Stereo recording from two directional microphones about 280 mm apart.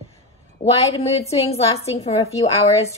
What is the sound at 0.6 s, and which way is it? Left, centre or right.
A woman's voice, left.